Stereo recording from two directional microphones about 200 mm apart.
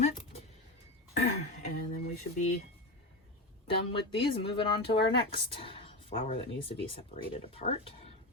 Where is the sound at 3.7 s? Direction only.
25° left (ahead or behind).